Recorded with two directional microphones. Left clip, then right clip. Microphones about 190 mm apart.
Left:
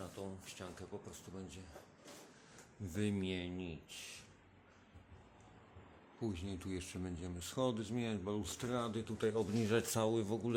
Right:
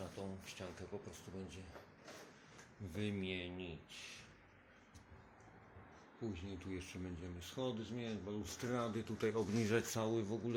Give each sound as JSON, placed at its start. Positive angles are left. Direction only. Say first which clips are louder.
{"t": 0.2, "sound": "speech", "louder": "left 1 dB", "side_deg": 0}
{"t": 2.9, "sound": "speech", "louder": "left 3 dB", "side_deg": 35}
{"t": 6.1, "sound": "speech", "louder": "left 4 dB", "side_deg": 30}
{"t": 8.6, "sound": "speech", "louder": "right 1 dB", "side_deg": 5}